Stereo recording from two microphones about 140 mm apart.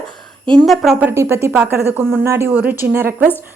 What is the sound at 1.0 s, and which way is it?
A woman's voice, 15° right (ahead or behind).